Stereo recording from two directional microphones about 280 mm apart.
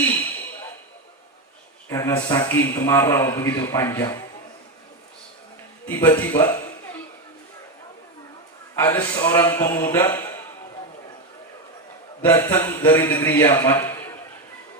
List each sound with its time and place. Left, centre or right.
0.1 s a sound: centre
1.9 s a man's voice: centre
5.9 s a man's voice: centre
8.7 s a man's voice: centre
12.2 s a man's voice: centre